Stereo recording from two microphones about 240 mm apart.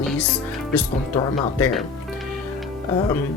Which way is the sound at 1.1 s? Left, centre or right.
Centre.